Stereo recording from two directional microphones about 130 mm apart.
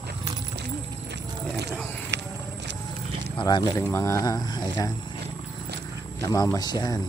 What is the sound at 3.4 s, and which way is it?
Speech, 30° left (ahead or behind).